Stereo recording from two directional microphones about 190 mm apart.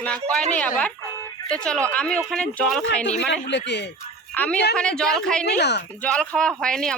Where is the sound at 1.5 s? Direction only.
5° left (ahead or behind).